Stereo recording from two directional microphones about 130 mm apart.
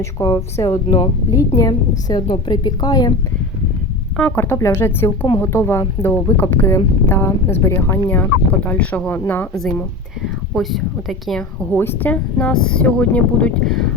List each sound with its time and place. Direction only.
0.0 s a woman's voice: 25° left (ahead or behind)
4.2 s a woman's voice: 15° left (ahead or behind)
10.2 s speech: centre (ahead or behind)
11.7 s speech: 15° left (ahead or behind)